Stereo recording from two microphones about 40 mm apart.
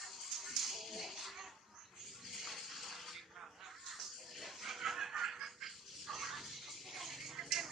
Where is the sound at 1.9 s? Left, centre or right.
Centre.